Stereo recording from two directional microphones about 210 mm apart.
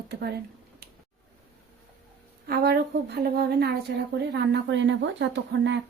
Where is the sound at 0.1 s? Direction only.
50° right (ahead or behind).